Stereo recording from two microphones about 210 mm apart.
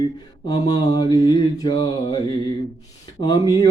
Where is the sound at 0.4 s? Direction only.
20° left (ahead or behind).